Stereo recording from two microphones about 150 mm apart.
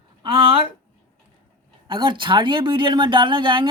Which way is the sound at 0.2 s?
35° right (ahead or behind).